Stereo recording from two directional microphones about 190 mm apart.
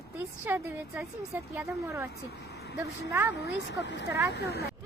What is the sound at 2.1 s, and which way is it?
Speech, 60° left (ahead or behind).